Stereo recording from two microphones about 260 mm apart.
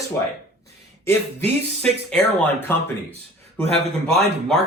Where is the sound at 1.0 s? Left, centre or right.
Centre.